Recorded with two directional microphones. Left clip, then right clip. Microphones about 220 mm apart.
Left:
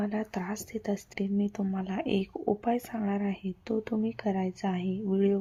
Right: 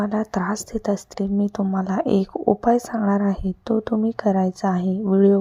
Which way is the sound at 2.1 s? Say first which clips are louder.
Right 9 dB; 25° right (ahead or behind).